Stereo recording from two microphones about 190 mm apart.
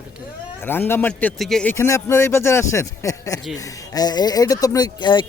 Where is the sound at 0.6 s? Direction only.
10° left (ahead or behind).